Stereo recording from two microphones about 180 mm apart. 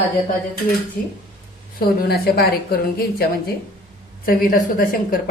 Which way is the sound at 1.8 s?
55° left (ahead or behind).